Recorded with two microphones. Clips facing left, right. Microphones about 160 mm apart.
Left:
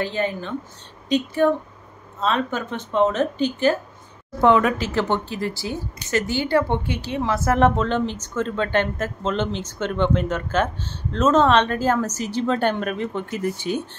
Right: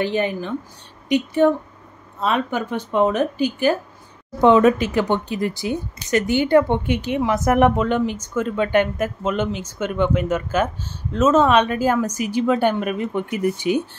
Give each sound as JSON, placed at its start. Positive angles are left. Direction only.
{"t": 0.0, "sound": "speech", "side_deg": -15}